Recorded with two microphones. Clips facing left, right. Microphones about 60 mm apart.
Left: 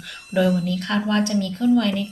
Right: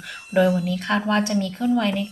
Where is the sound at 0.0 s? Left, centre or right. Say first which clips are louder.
Right 1 dB; centre.